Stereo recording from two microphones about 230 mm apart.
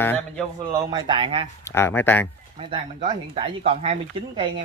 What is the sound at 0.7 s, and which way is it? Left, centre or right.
Speech, centre.